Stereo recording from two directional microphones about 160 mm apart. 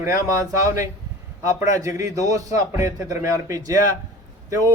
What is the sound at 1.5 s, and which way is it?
A man's voice, 20° right (ahead or behind).